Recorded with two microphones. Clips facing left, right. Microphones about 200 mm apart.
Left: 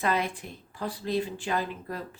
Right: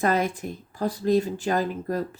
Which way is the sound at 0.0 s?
45° right (ahead or behind).